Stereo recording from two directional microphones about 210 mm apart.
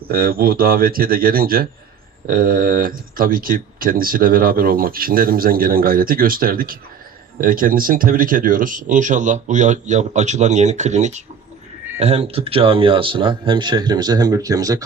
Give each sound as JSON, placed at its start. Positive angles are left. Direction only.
{"t": 0.1, "sound": "speech", "side_deg": -45}